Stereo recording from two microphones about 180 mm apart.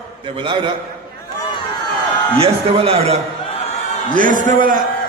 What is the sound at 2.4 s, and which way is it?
Speech, 30° right (ahead or behind).